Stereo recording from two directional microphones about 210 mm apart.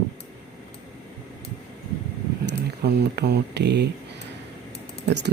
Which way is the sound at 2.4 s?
55° right (ahead or behind).